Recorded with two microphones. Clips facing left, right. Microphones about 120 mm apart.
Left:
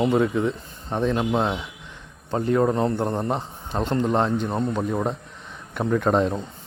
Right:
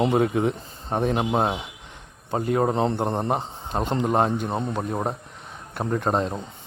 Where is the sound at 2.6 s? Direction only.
25° right (ahead or behind).